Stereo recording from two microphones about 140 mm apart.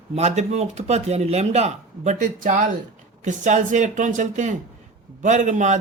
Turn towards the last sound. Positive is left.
turn(degrees=-60)  # may be behind; listen again after turning